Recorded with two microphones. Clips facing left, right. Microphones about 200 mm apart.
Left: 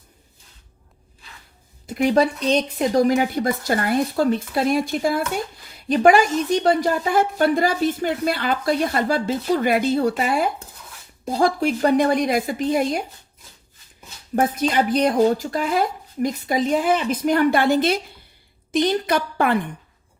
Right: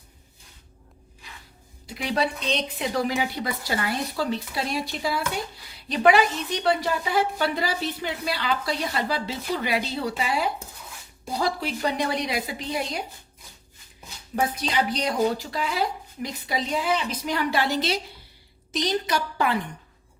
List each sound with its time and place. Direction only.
1.9 s a woman's voice: 50° left (ahead or behind)
14.3 s a woman's voice: 50° left (ahead or behind)